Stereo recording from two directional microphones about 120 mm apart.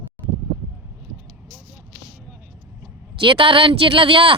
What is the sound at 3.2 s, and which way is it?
Speech, 45° right (ahead or behind).